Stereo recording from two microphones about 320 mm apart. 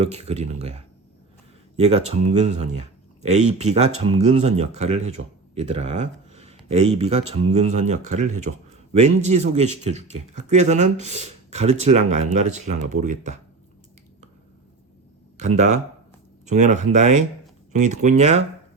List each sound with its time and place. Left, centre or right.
0.0 s speech: centre
15.4 s speech: right